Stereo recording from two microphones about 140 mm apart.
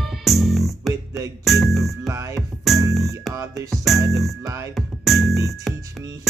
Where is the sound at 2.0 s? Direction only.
20° right (ahead or behind).